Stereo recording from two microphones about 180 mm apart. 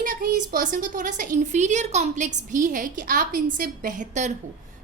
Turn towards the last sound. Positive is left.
turn(degrees=-45)  # may be behind; listen again after turning